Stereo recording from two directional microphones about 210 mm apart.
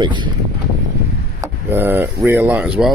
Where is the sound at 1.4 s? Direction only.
10° right (ahead or behind).